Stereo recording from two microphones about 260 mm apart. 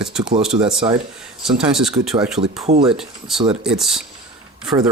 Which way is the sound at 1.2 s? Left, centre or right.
Centre.